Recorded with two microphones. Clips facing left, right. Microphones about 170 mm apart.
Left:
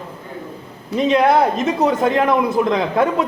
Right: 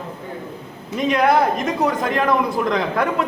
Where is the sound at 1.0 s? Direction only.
25° left (ahead or behind).